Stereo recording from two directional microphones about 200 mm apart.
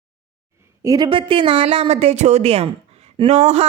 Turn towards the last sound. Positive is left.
turn(degrees=-30)  # may be behind; listen again after turning